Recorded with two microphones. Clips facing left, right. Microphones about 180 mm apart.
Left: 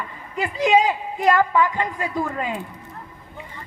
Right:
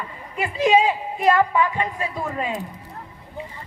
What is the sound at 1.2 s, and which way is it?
Speech, 25° right (ahead or behind).